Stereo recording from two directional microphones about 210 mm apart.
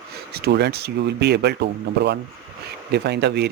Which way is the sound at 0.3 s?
50° right (ahead or behind).